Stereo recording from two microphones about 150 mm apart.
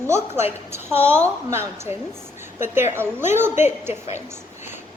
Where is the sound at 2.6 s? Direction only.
15° right (ahead or behind).